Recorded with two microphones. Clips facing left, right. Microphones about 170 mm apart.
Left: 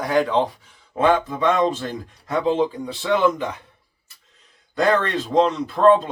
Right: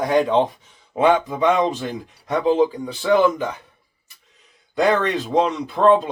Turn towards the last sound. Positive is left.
turn(degrees=-15)  # may be behind; listen again after turning